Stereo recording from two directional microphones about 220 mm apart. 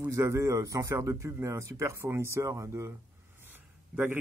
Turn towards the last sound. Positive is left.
turn(degrees=-10)  # may be behind; listen again after turning